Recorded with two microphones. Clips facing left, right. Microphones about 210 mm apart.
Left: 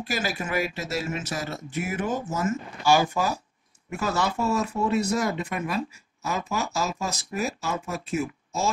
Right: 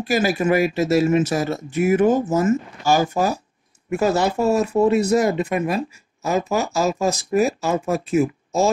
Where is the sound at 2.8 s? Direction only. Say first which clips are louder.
Right 3 dB; 40° right (ahead or behind).